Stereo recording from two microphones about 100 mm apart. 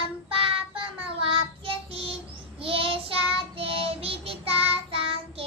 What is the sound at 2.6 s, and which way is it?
Child singing, 65° right (ahead or behind).